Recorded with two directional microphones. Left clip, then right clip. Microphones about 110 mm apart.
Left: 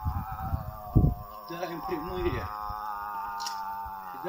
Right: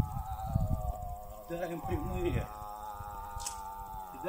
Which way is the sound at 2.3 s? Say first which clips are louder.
Left 5 dB; 30° right (ahead or behind).